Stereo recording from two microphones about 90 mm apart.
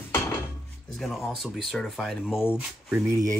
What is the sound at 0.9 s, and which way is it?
Speech, centre (ahead or behind).